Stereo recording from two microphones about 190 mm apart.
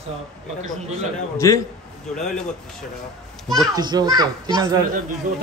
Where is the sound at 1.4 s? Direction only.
15° left (ahead or behind).